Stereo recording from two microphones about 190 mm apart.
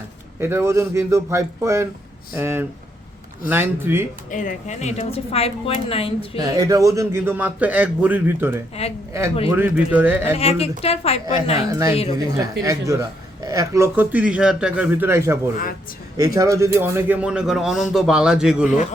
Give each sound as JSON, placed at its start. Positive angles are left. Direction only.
{"t": 0.3, "sound": "a man's voice", "side_deg": -10}
{"t": 4.3, "sound": "speech", "side_deg": 45}
{"t": 6.4, "sound": "a man's voice", "side_deg": -20}
{"t": 10.3, "sound": "speech", "side_deg": 30}
{"t": 11.7, "sound": "a man's voice", "side_deg": -15}